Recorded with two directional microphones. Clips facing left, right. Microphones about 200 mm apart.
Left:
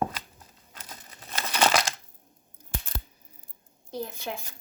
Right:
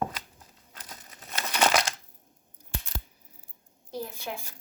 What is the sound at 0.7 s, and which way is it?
Crumpling, 30° left (ahead or behind).